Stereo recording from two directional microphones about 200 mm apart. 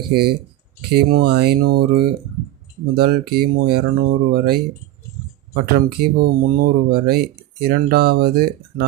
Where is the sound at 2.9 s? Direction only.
50° right (ahead or behind).